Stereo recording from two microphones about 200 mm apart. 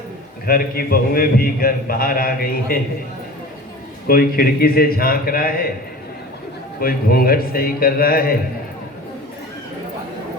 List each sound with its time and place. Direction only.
0.4 s a man's voice: 45° left (ahead or behind)
4.0 s a man's voice: 50° left (ahead or behind)
6.7 s a man's voice: 45° left (ahead or behind)